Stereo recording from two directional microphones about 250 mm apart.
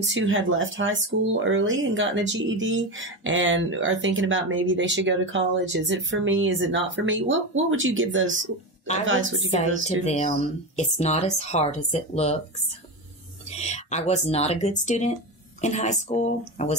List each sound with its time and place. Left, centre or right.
0.0 s speech: right
9.5 s speech: left
13.6 s speech: left